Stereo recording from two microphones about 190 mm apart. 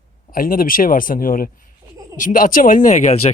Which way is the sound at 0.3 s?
45° left (ahead or behind).